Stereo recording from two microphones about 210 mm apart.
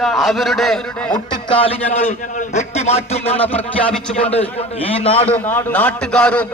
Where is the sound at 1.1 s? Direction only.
20° left (ahead or behind).